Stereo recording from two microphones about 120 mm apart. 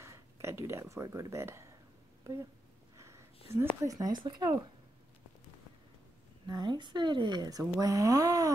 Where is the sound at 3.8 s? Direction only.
30° right (ahead or behind).